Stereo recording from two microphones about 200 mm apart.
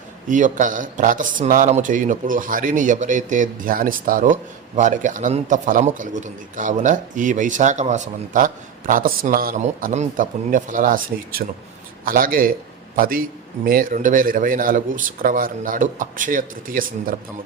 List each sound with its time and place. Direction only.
0.3 s a man's voice: 40° right (ahead or behind)